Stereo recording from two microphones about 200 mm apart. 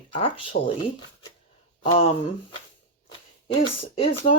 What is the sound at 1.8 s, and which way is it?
Speech, 25° left (ahead or behind).